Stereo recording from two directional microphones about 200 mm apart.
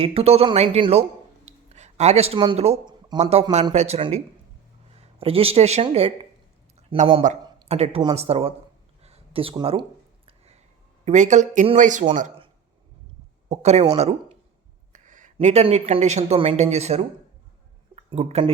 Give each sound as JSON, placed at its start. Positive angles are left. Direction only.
{"t": 0.0, "sound": "speech", "side_deg": -30}
{"t": 9.0, "sound": "a sound", "side_deg": -30}
{"t": 11.0, "sound": "speech", "side_deg": -35}
{"t": 13.5, "sound": "speech", "side_deg": -35}